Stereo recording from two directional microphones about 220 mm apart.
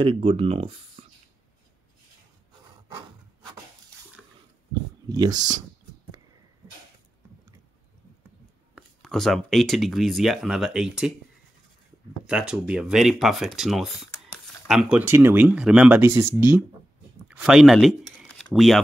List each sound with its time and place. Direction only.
0.0 s speech: 25° right (ahead or behind)
4.2 s a sound: centre (ahead or behind)
5.1 s speech: 20° right (ahead or behind)
8.7 s speech: centre (ahead or behind)
12.3 s speech: 5° right (ahead or behind)
17.3 s a sound: centre (ahead or behind)